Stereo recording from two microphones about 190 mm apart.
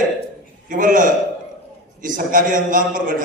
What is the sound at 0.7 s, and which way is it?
A man's voice, 45° right (ahead or behind).